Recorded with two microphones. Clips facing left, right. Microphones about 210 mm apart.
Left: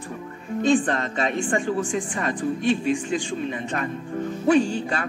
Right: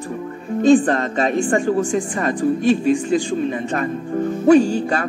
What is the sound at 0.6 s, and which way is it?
A man's voice, 40° right (ahead or behind).